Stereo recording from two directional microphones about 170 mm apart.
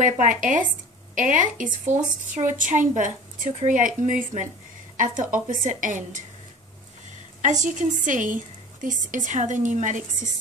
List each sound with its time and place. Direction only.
0.0 s a woman's voice: 50° right (ahead or behind)
7.4 s a woman's voice: 45° right (ahead or behind)